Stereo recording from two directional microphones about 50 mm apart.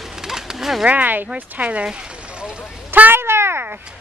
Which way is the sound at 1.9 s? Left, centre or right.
Centre.